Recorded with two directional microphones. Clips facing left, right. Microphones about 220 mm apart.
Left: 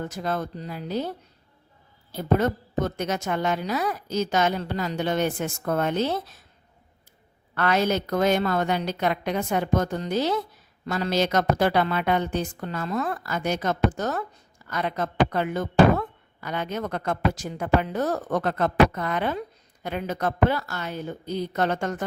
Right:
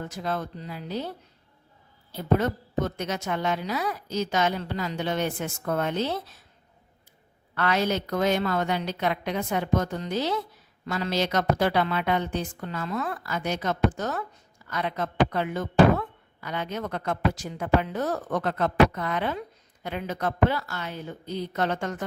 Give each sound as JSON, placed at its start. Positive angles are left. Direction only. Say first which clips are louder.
{"t": 0.2, "sound": "speech", "louder": "left 1 dB", "side_deg": 45}
{"t": 2.1, "sound": "speech", "louder": "left 2 dB", "side_deg": 45}
{"t": 7.5, "sound": "speech", "louder": "left 2 dB", "side_deg": 50}